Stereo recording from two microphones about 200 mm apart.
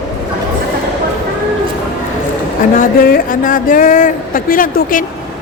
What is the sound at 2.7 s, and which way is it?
Speech, 40° left (ahead or behind).